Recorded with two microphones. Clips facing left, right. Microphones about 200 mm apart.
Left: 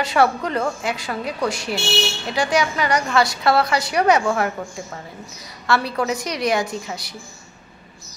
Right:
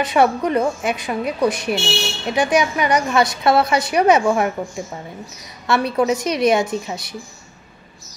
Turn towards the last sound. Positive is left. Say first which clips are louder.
# right 4 dB
turn(degrees=-20)  # may be behind; listen again after turning